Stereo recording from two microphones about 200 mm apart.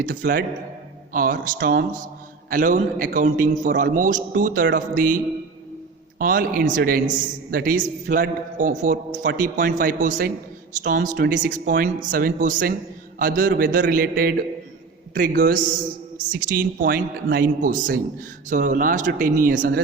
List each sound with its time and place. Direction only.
0.0 s a man's voice: 40° right (ahead or behind)